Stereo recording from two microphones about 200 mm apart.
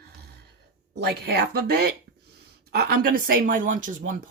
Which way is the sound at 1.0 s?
55° right (ahead or behind).